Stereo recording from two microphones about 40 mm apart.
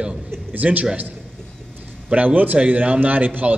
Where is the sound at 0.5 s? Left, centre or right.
Right.